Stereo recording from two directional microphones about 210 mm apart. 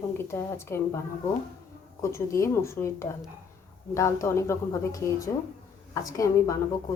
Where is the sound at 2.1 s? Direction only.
15° left (ahead or behind).